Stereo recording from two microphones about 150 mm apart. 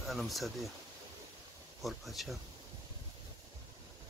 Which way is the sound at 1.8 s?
Centre (ahead or behind).